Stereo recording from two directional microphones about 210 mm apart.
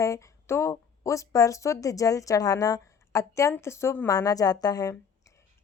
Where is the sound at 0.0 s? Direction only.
15° left (ahead or behind).